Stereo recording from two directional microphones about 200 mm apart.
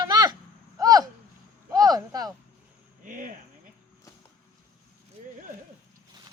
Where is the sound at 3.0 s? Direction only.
40° right (ahead or behind).